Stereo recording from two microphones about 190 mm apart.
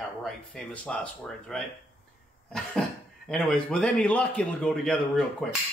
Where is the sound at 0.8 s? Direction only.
5° left (ahead or behind).